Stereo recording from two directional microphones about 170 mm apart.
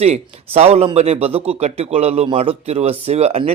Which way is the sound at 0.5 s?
35° right (ahead or behind).